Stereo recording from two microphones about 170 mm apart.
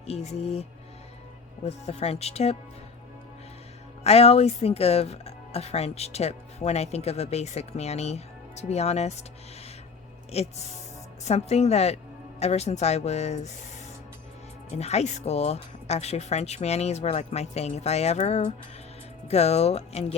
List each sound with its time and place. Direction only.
0.0 s speech: 40° left (ahead or behind)
4.0 s speech: 35° left (ahead or behind)
10.3 s speech: 40° left (ahead or behind)
14.7 s speech: 40° left (ahead or behind)